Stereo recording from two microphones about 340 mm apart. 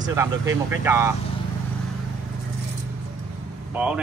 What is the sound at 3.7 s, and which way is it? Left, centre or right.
Speech, centre.